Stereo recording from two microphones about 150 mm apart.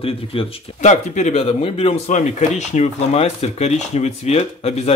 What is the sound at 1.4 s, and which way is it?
Speech, 40° left (ahead or behind).